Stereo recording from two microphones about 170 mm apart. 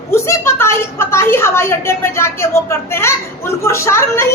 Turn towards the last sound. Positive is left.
turn(degrees=15)  # may be behind; listen again after turning